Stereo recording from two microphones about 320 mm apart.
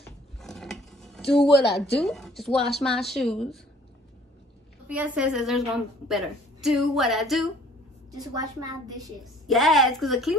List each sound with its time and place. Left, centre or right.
0.4 s mechanisms: centre
1.5 s speech: left
2.0 s a woman's voice: centre
4.8 s a woman's voice: centre
8.1 s a woman's voice: centre
9.2 s a woman's voice: centre